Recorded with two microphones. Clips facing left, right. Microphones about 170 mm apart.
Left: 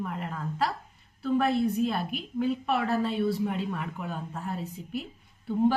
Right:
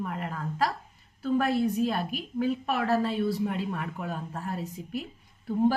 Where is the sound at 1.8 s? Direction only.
40° right (ahead or behind).